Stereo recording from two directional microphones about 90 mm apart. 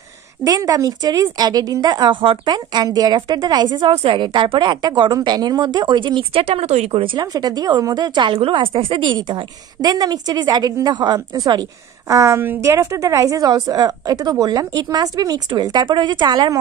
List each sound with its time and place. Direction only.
0.4 s a woman's voice: 45° right (ahead or behind); by 7.1 s 90° right
7.2 s a woman's voice: 50° right (ahead or behind)
12.1 s a woman's voice: 35° right (ahead or behind)